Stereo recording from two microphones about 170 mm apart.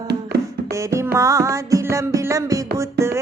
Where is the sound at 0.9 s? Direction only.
15° right (ahead or behind).